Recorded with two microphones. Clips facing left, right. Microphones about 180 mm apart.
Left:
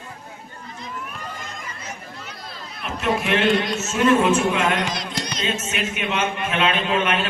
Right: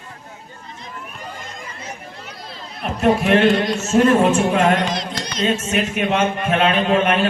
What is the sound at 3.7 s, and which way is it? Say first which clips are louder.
Speech: right 4 dB; 35° right (ahead or behind).